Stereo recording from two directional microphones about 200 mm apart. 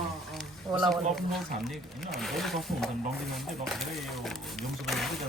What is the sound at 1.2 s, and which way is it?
Speech, centre (ahead or behind).